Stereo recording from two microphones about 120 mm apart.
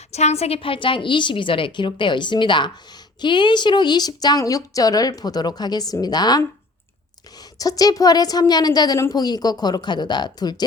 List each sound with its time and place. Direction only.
0.1 s a woman's voice: 65° left (ahead or behind); by 6.4 s 35° left (ahead or behind)
7.6 s a woman's voice: 30° left (ahead or behind)